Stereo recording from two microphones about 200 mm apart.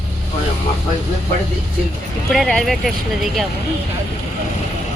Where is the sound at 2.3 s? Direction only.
Centre (ahead or behind).